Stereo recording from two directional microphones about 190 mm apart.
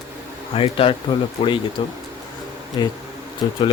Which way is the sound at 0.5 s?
30° left (ahead or behind).